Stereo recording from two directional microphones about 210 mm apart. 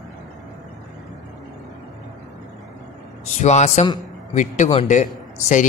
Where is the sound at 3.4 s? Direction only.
35° left (ahead or behind).